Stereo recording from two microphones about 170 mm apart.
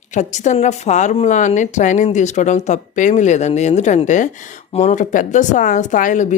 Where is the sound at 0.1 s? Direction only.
45° left (ahead or behind).